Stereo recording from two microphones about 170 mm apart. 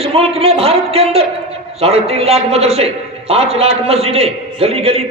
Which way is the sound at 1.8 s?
35° right (ahead or behind).